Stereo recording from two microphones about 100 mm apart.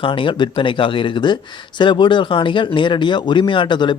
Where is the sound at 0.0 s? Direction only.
55° left (ahead or behind).